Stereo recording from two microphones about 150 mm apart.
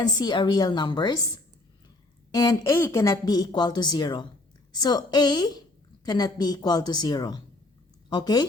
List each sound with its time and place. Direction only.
0.2 s a woman's voice: 30° left (ahead or behind)
2.3 s a woman's voice: 25° left (ahead or behind)